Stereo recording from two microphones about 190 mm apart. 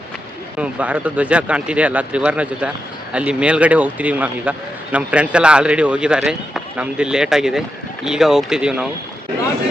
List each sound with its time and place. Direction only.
0.6 s speech: 5° right (ahead or behind)